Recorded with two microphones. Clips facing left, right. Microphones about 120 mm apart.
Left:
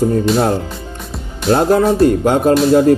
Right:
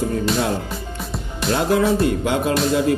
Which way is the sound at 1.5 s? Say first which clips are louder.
Left 6 dB; 45° left (ahead or behind).